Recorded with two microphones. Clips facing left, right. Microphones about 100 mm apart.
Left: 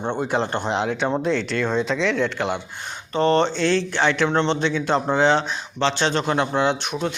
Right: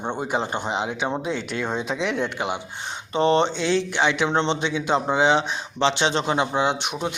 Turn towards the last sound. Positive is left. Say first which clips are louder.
# left 2 dB
turn(degrees=-15)  # may be behind; listen again after turning